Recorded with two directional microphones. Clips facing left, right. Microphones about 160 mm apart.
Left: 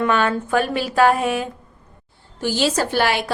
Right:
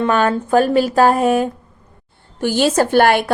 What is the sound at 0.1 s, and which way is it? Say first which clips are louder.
A woman's voice: right 4 dB; 40° right (ahead or behind).